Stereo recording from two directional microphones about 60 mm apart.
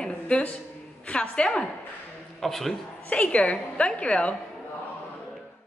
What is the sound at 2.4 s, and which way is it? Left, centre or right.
Speech, centre.